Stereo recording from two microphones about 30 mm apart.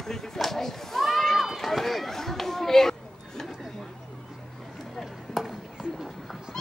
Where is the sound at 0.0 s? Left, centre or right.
Centre.